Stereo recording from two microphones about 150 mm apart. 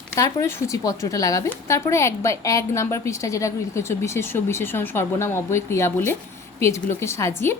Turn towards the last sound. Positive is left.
turn(degrees=15)  # may be behind; listen again after turning